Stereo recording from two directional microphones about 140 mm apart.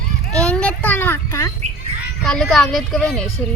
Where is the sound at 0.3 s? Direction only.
5° left (ahead or behind).